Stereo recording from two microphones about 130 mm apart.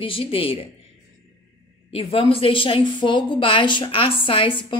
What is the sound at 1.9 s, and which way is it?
Speech, 45° left (ahead or behind).